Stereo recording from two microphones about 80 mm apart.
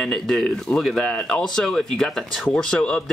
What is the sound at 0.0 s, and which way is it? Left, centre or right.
Speech, centre.